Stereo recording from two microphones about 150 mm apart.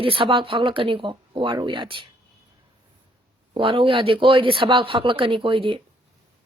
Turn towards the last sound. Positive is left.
turn(degrees=-35)  # may be behind; listen again after turning